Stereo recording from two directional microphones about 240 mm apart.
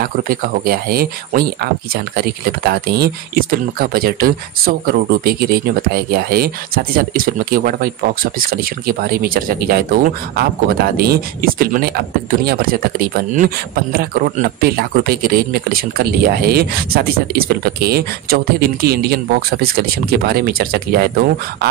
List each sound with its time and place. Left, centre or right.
0.0 s speech: right